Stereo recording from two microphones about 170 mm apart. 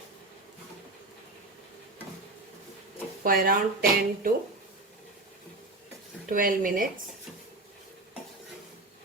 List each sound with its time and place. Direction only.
3.2 s speech: 55° right (ahead or behind)
6.2 s speech: 55° right (ahead or behind)